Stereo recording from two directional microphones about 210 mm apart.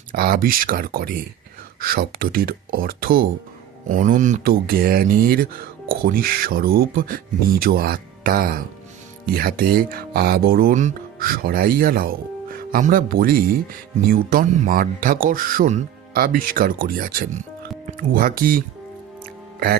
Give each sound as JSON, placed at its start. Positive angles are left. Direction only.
{"t": 0.1, "sound": "speech", "side_deg": -45}
{"t": 19.2, "sound": "music", "side_deg": -45}